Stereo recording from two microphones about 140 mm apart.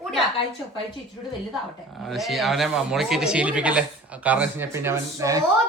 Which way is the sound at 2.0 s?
Centre (ahead or behind).